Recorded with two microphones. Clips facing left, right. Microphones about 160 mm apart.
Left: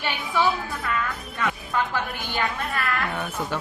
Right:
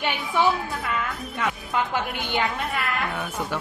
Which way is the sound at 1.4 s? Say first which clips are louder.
Even; 20° right (ahead or behind).